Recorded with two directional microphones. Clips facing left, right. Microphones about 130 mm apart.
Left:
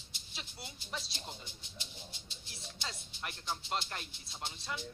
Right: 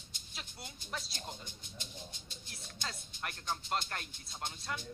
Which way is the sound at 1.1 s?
45° right (ahead or behind).